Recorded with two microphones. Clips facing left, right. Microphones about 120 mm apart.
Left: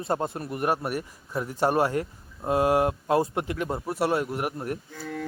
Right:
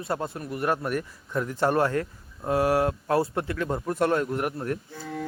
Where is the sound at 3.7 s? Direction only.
5° left (ahead or behind).